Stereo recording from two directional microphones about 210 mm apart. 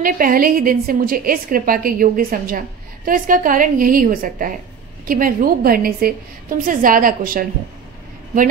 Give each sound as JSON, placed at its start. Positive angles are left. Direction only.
{"t": 0.0, "sound": "a woman's voice", "side_deg": -40}